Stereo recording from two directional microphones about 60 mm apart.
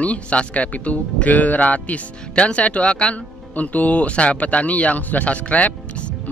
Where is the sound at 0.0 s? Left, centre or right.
Left.